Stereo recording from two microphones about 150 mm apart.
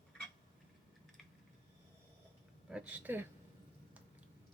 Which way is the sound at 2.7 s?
10° right (ahead or behind).